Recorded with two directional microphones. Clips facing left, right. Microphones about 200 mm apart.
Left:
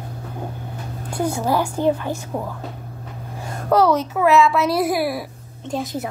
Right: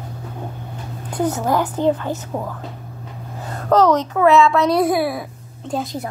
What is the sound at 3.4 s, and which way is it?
A woman's voice, 10° left (ahead or behind).